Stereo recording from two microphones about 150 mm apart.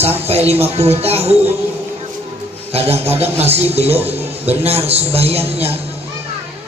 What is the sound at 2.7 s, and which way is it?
A man's voice, 40° right (ahead or behind).